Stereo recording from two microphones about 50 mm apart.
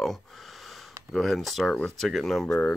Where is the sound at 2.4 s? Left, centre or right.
Left.